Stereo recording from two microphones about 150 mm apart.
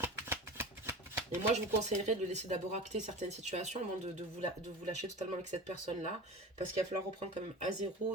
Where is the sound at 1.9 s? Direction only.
50° right (ahead or behind).